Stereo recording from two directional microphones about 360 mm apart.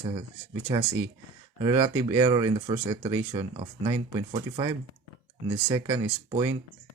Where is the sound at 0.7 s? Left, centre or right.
Centre.